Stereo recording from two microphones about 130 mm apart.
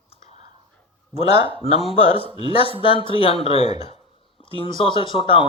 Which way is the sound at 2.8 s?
45° left (ahead or behind).